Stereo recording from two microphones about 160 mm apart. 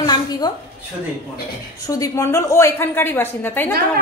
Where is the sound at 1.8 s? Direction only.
20° left (ahead or behind).